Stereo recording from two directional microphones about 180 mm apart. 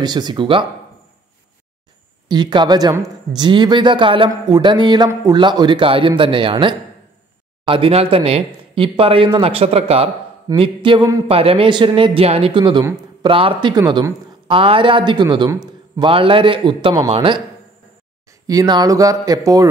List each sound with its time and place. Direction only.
0.0 s speech: 25° right (ahead or behind)
2.2 s speech: 25° right (ahead or behind)
11.2 s speech: 30° right (ahead or behind)
18.5 s speech: 20° right (ahead or behind)